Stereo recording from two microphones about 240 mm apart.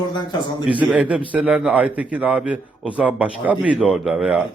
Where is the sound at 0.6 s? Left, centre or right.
Centre.